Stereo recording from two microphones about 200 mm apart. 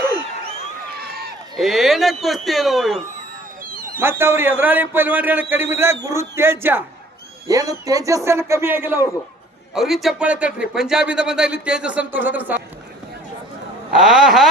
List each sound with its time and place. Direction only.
0.9 s crowd: 50° right (ahead or behind)
1.5 s speech: centre (ahead or behind)
3.6 s a sound: 45° right (ahead or behind)
4.0 s a man's voice: 10° right (ahead or behind)
13.9 s speech: centre (ahead or behind)